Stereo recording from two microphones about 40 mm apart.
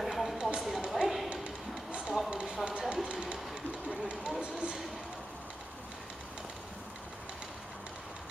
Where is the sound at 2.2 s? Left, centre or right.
Right.